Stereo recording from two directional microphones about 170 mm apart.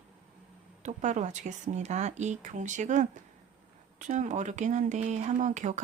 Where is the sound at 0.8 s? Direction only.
45° right (ahead or behind).